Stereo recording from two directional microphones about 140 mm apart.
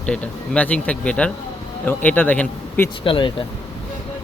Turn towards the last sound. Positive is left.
turn(degrees=35)  # may be behind; listen again after turning